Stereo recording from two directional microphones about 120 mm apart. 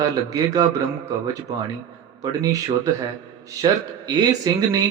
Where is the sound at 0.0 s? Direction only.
30° right (ahead or behind).